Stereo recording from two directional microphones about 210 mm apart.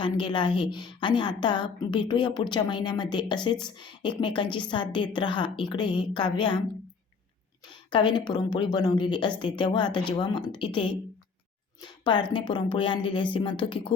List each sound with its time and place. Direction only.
0.0 s a woman's voice: 25° left (ahead or behind)
7.7 s a woman's voice: 20° left (ahead or behind)